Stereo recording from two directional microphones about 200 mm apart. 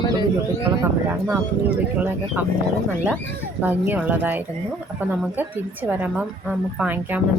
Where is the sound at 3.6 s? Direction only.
10° right (ahead or behind).